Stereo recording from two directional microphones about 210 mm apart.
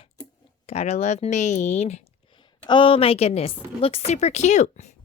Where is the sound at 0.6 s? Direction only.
30° left (ahead or behind).